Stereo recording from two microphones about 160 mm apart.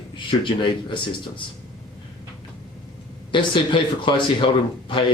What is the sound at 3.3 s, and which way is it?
Speech, 30° left (ahead or behind).